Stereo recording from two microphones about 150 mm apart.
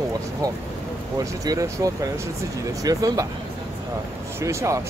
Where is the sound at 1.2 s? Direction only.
20° right (ahead or behind).